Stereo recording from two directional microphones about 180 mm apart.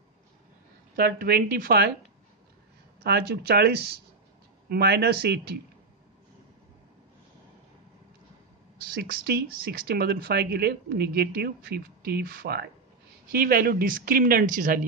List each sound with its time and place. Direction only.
0.9 s speech: 55° right (ahead or behind)
3.0 s speech: 60° right (ahead or behind)
8.8 s speech: 55° right (ahead or behind)